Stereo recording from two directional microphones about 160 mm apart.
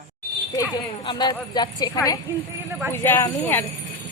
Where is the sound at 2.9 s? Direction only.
15° left (ahead or behind).